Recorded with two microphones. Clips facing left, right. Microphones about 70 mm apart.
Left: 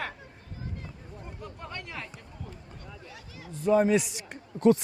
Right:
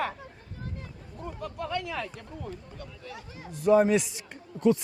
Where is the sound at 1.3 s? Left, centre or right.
Right.